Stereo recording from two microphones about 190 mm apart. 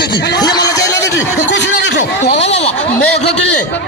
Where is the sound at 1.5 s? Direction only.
65° left (ahead or behind).